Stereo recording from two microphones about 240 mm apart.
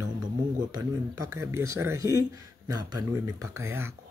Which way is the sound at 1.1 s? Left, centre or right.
Right.